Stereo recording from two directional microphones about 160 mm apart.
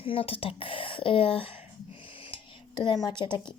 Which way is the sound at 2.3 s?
30° left (ahead or behind).